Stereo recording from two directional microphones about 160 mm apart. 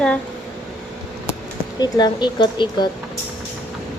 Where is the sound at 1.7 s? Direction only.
25° left (ahead or behind).